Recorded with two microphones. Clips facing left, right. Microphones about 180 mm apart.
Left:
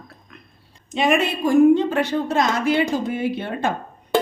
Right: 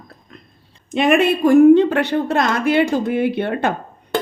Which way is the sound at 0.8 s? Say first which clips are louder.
Right 5 dB; 60° right (ahead or behind).